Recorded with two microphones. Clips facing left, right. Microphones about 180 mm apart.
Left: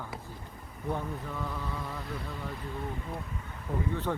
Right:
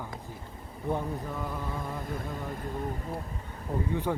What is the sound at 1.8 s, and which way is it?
Speech, 50° right (ahead or behind).